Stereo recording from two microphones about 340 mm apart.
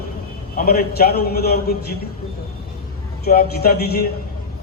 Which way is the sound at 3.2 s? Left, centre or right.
Left.